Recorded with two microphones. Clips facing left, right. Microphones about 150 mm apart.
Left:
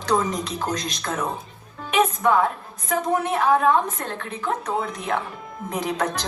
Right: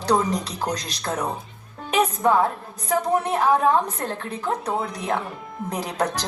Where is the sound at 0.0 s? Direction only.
35° right (ahead or behind).